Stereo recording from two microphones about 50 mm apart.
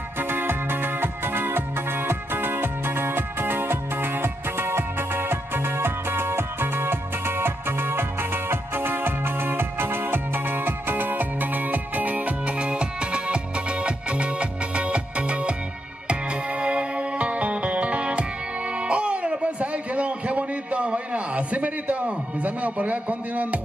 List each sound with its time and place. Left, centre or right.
0.2 s music: right